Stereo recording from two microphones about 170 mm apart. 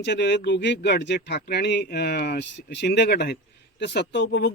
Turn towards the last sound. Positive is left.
turn(degrees=85)